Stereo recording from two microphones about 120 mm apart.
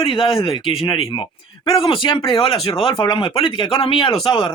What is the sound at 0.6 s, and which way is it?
Speech, 50° left (ahead or behind).